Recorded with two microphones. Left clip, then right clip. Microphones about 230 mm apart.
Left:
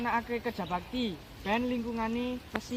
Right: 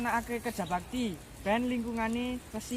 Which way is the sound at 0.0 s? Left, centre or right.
Centre.